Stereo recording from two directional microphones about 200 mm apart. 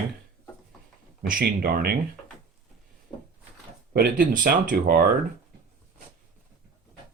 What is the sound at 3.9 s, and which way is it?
Speech, 45° right (ahead or behind).